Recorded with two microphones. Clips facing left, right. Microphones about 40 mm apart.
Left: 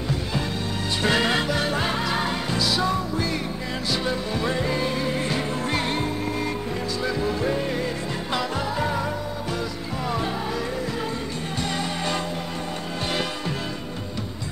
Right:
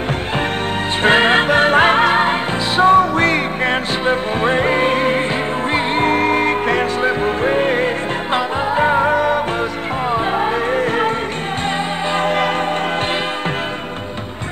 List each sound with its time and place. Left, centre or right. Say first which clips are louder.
1.0 s music: right 10 dB; right
4.0 s music: right 9 dB; right
6.0 s music: right 12 dB; right
9.1 s music: right 15 dB; right
10.1 s music: right 10 dB; right